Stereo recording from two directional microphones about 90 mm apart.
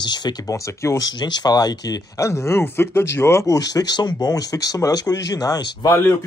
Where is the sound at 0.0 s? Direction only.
50° left (ahead or behind).